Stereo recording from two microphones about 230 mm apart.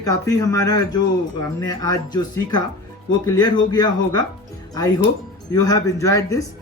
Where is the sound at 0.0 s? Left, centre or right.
Centre.